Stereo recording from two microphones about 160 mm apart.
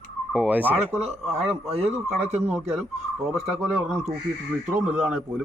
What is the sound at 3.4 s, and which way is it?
Speech, 5° right (ahead or behind).